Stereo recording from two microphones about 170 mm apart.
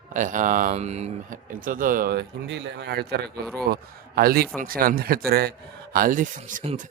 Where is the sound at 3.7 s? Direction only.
60° right (ahead or behind).